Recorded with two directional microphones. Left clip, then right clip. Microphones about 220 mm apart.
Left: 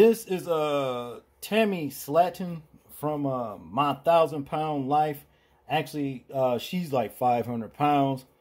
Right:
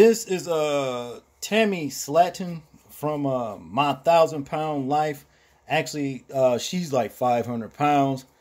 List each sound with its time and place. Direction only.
0.0 s speech: 10° right (ahead or behind)